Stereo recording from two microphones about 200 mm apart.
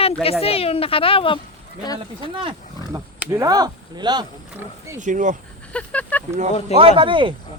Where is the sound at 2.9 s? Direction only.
15° right (ahead or behind).